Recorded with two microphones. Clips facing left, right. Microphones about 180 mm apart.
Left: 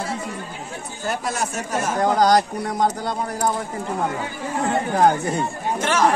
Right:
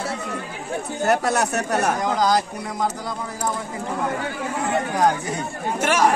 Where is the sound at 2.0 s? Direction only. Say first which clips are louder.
Left 3 dB; 50° left (ahead or behind).